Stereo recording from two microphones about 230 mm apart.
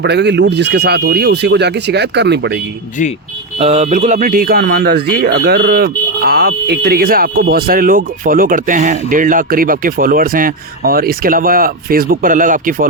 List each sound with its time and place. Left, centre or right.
0.0 s speech: right
3.6 s speech: right